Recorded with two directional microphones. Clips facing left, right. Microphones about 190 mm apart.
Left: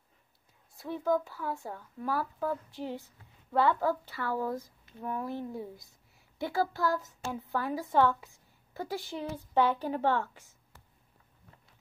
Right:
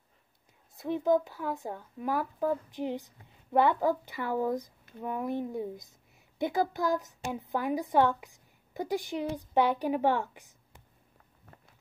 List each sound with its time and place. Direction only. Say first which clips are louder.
0.7 s a woman's voice: right 3 dB; 20° right (ahead or behind)